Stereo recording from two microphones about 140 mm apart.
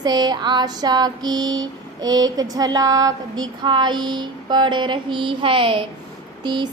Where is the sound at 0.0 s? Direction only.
30° right (ahead or behind).